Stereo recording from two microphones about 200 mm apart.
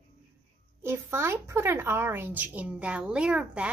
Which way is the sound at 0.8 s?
10° right (ahead or behind).